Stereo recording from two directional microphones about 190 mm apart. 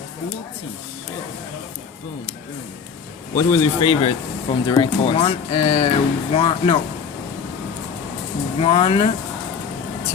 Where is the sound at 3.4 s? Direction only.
25° left (ahead or behind).